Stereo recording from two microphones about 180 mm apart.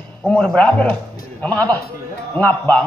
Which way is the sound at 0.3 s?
5° left (ahead or behind).